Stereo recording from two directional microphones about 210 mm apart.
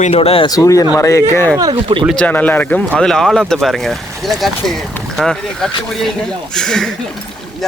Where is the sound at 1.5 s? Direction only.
20° right (ahead or behind).